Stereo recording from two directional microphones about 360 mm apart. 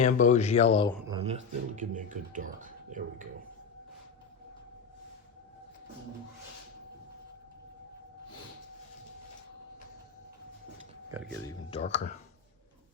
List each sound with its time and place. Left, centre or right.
0.0 s speech: centre
1.0 s speech: centre
11.4 s speech: centre